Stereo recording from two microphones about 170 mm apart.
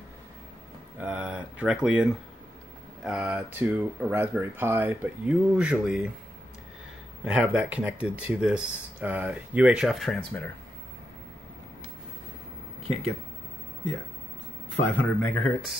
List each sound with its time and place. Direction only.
0.9 s speech: 10° right (ahead or behind)
7.2 s speech: 5° right (ahead or behind)
12.8 s speech: 35° right (ahead or behind)
15.2 s speech: 5° left (ahead or behind)